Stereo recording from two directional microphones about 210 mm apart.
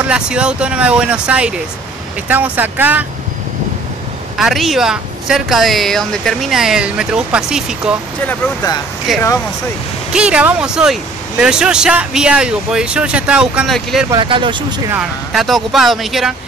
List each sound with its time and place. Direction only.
0.0 s speech: 5° right (ahead or behind)
4.4 s speech: centre (ahead or behind)
9.1 s speech: centre (ahead or behind)
14.1 s speech: 25° right (ahead or behind)
14.9 s speech: centre (ahead or behind)